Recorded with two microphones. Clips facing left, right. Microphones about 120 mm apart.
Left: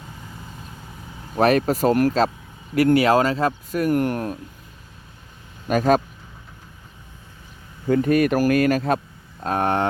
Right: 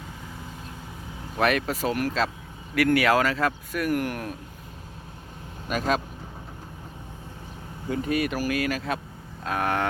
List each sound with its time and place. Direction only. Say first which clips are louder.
1.4 s speech: left 7 dB; 35° left (ahead or behind)
5.6 s speech: left 8 dB; 45° left (ahead or behind)
7.9 s speech: left 8 dB; 50° left (ahead or behind)
9.4 s speech: left 5 dB; 35° left (ahead or behind)